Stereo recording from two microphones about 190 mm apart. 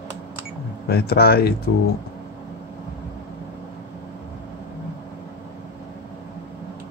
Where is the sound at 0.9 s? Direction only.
55° left (ahead or behind).